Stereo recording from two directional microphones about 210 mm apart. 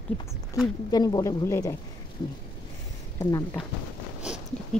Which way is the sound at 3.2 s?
20° left (ahead or behind).